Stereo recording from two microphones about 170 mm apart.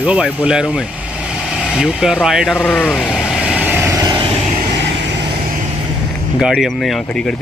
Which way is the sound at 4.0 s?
20° right (ahead or behind).